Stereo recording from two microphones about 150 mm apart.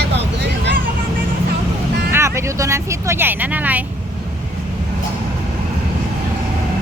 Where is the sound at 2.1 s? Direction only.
20° right (ahead or behind).